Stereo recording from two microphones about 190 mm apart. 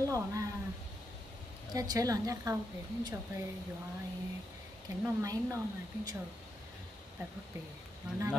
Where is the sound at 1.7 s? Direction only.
20° right (ahead or behind).